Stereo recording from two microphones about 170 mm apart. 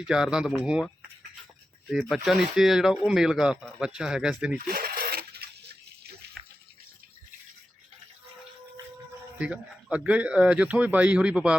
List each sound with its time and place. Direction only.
0.0 s speech: 5° right (ahead or behind)
1.9 s speech: centre (ahead or behind)
4.6 s sewing machine: 60° right (ahead or behind)
6.4 s bathtub: centre (ahead or behind)
9.4 s speech: 5° right (ahead or behind)